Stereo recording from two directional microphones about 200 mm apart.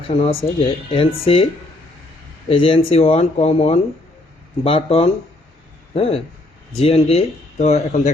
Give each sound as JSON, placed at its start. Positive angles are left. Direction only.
{"t": 0.2, "sound": "speech", "side_deg": 30}
{"t": 2.5, "sound": "speech", "side_deg": 25}